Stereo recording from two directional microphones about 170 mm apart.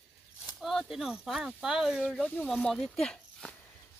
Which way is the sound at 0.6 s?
Centre (ahead or behind).